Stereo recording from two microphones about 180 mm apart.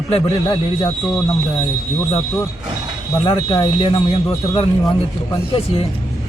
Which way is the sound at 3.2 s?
30° left (ahead or behind).